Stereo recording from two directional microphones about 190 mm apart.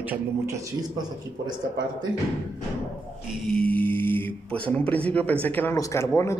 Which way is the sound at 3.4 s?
5° left (ahead or behind).